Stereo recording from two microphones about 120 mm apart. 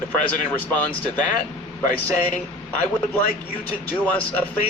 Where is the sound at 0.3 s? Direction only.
15° left (ahead or behind).